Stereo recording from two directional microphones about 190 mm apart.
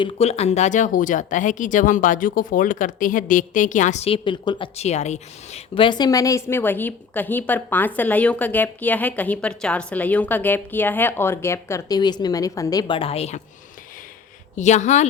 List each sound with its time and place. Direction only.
0.0 s speech: 30° left (ahead or behind)
14.5 s speech: 40° left (ahead or behind)